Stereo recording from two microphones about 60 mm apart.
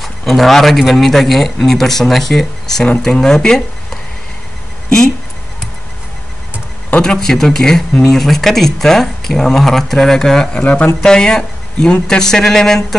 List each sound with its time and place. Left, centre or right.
0.0 s speech: centre
4.8 s a sound: centre
7.0 s speech: centre
10.5 s speech: left
11.0 s speech: centre